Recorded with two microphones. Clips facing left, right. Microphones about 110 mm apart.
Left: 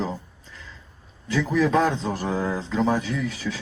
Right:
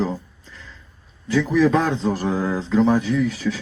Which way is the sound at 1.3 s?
Centre (ahead or behind).